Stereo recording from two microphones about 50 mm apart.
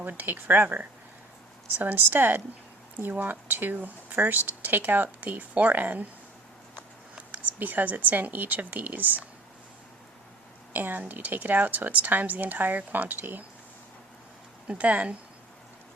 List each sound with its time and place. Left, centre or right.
0.0 s speech: right
7.3 s speech: right
10.7 s speech: right
14.7 s speech: right